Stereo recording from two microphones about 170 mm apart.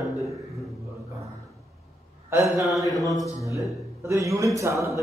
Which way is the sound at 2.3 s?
15° right (ahead or behind).